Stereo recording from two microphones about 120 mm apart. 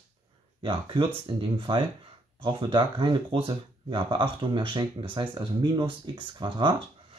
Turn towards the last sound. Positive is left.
turn(degrees=-45)  # may be behind; listen again after turning